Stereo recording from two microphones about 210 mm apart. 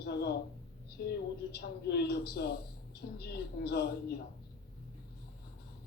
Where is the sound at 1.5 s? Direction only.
50° left (ahead or behind).